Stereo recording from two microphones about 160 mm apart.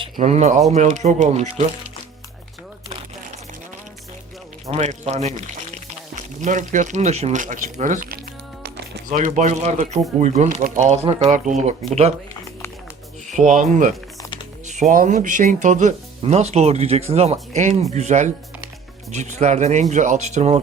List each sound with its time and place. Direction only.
0.2 s speech: 45° right (ahead or behind)
4.7 s speech: 45° right (ahead or behind)
13.5 s speech: 50° right (ahead or behind)